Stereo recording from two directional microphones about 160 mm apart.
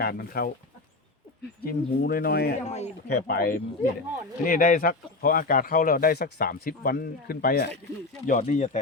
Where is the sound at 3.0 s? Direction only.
85° left.